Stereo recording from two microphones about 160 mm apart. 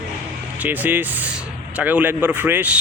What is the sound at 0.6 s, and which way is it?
Speech, 10° right (ahead or behind).